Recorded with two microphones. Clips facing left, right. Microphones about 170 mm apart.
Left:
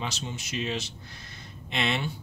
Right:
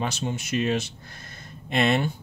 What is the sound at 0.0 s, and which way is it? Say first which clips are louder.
Speech: right 6 dB; 50° right (ahead or behind).